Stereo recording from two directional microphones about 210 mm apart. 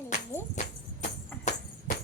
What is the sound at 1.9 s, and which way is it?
Tambourine, 35° left (ahead or behind).